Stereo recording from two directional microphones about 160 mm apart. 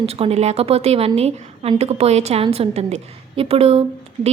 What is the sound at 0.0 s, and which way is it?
A woman's voice, 40° right (ahead or behind).